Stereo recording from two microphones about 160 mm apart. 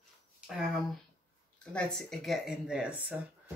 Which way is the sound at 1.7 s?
5° left (ahead or behind).